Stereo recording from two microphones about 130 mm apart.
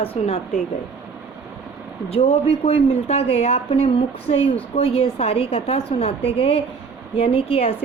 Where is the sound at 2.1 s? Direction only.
55° left (ahead or behind).